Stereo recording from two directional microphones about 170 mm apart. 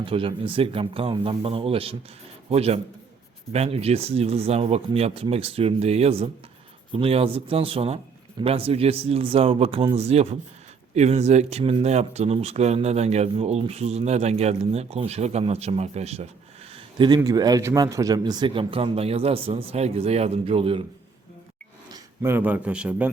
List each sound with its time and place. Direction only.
0.0 s speech: 30° right (ahead or behind)
16.7 s a sound: 25° right (ahead or behind)
17.2 s speech: 20° right (ahead or behind)
21.9 s a man's voice: 15° right (ahead or behind)